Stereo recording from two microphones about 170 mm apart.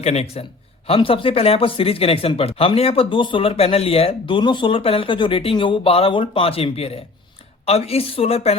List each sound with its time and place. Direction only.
0.0 s speech: 40° left (ahead or behind)